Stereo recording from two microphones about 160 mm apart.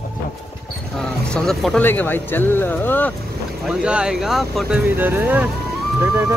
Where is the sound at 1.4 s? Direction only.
5° left (ahead or behind).